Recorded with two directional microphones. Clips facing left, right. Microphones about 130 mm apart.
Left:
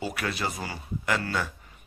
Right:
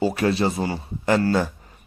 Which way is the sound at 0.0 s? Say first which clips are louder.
Right 10 dB; 30° right (ahead or behind).